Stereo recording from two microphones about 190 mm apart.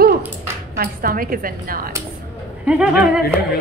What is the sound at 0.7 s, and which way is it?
A woman's voice, 50° right (ahead or behind).